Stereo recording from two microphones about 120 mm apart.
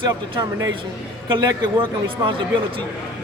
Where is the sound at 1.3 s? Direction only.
40° right (ahead or behind).